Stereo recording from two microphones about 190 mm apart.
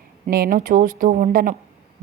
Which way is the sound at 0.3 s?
50° right (ahead or behind).